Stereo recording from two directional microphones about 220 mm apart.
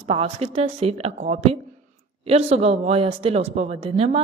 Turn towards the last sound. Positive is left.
turn(degrees=-25)  # may be behind; listen again after turning